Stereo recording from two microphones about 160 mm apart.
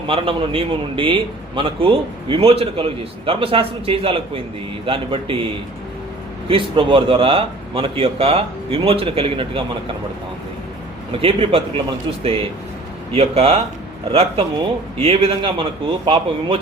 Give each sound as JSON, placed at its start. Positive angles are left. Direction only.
{"t": 0.1, "sound": "a man's voice", "side_deg": -35}
{"t": 6.5, "sound": "a man's voice", "side_deg": -35}
{"t": 11.2, "sound": "a man's voice", "side_deg": -35}